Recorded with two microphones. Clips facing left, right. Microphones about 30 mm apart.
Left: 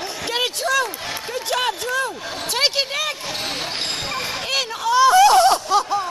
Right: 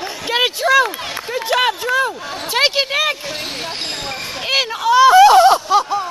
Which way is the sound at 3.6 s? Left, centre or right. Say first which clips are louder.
Right 1 dB; centre.